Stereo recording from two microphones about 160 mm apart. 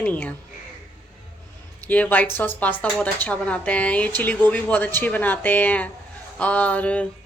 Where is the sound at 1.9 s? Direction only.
10° left (ahead or behind).